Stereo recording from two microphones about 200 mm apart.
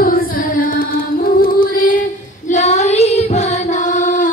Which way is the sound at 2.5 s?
35° left (ahead or behind).